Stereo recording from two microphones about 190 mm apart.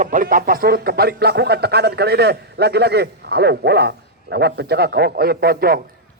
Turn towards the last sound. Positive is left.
turn(degrees=-50)  # may be behind; listen again after turning